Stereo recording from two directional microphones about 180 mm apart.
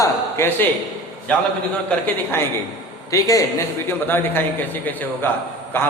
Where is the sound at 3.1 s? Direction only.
20° left (ahead or behind).